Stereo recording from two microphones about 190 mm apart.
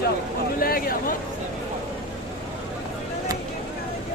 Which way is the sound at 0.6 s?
50° left (ahead or behind).